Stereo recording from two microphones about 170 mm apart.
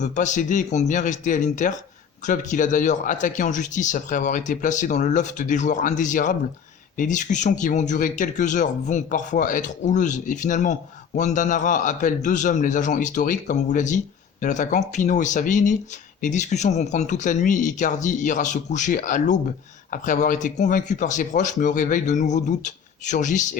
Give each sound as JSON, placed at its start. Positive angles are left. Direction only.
{"t": 0.0, "sound": "speech", "side_deg": 45}